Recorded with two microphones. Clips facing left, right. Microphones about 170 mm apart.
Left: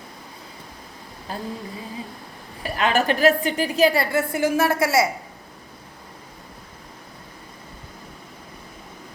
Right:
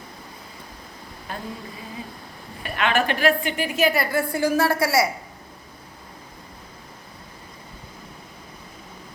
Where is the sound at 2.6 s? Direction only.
35° left (ahead or behind).